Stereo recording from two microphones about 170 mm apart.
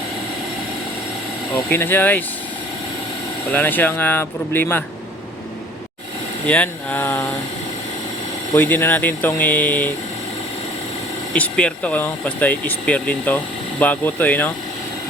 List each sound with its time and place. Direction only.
1.5 s speech: 15° left (ahead or behind)
3.5 s speech: 10° left (ahead or behind)
6.5 s speech: 10° left (ahead or behind)
8.5 s speech: 10° left (ahead or behind)
11.3 s speech: 5° left (ahead or behind)